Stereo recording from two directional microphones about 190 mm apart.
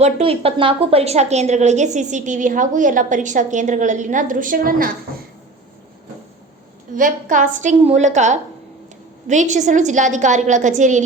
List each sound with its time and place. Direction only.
0.0 s a woman's voice: 30° right (ahead or behind); by 4.9 s 45° right (ahead or behind)
6.9 s a woman's voice: 45° right (ahead or behind)